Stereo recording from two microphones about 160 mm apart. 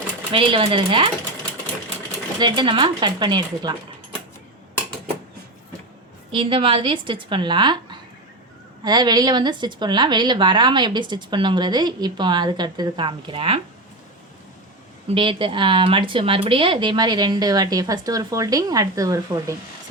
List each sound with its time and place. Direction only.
0.3 s a woman's voice: 35° right (ahead or behind)
2.4 s a woman's voice: 30° right (ahead or behind)
6.3 s a woman's voice: 35° right (ahead or behind)
15.1 s a woman's voice: 30° right (ahead or behind)